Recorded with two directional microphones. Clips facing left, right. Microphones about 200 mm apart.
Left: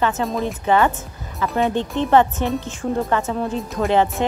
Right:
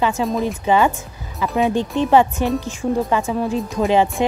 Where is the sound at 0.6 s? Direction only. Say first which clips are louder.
Even; 15° right (ahead or behind).